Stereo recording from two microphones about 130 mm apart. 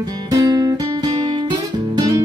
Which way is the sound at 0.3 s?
30° right (ahead or behind).